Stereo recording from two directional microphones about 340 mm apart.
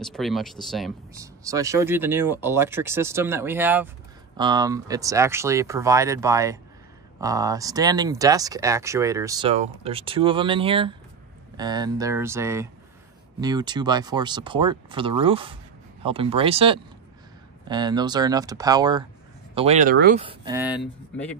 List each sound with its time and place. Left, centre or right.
0.0 s speech: centre